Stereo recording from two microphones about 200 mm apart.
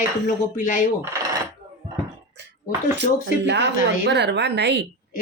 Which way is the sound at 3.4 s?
60° right (ahead or behind).